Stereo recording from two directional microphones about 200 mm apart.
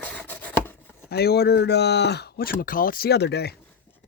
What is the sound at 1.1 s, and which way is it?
Speech, 50° left (ahead or behind).